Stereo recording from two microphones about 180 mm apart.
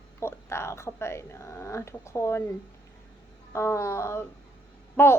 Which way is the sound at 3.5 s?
15° left (ahead or behind).